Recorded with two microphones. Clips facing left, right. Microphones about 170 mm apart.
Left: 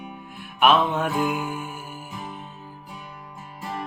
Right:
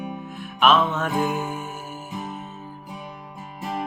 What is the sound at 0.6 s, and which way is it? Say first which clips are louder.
Music: even; 10° left (ahead or behind).